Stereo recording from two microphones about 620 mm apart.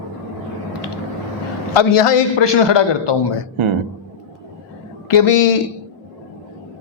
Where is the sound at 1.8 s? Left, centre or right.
Left.